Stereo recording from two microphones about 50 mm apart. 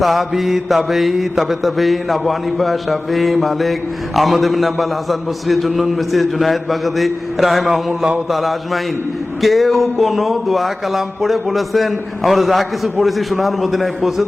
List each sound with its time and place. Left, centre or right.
0.0 s mantra: centre